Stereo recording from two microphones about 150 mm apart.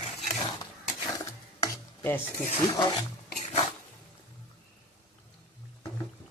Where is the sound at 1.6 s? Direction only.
15° left (ahead or behind).